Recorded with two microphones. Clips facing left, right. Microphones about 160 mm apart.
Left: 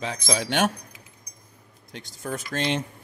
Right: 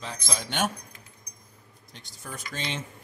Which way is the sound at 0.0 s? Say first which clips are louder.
Left 7 dB; 90° left.